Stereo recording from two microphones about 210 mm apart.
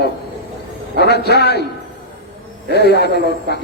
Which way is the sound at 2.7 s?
50° left (ahead or behind).